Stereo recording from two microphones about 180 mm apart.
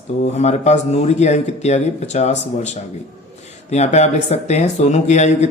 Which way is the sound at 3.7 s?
40° left (ahead or behind).